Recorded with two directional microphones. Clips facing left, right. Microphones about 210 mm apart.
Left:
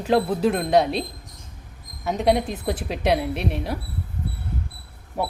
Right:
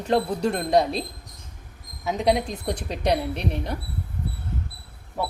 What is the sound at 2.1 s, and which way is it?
Speech, centre (ahead or behind).